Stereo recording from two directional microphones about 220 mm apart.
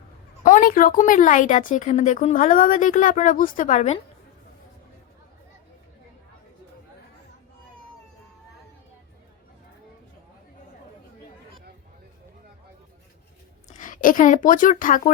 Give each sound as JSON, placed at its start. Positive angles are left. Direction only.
{"t": 0.4, "sound": "a woman's voice", "side_deg": 35}
{"t": 13.7, "sound": "speech", "side_deg": 35}